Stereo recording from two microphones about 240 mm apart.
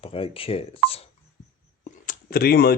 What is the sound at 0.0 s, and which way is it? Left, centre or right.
Speech, left.